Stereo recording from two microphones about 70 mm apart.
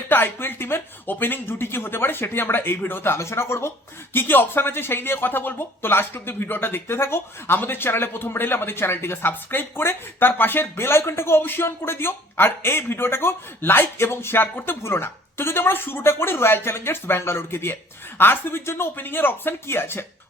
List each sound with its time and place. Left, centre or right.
0.1 s speech: left